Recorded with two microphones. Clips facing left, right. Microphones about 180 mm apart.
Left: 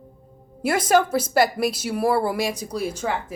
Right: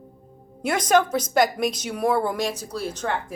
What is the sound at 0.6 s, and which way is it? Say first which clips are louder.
A woman's voice: left 1 dB; 5° left (ahead or behind).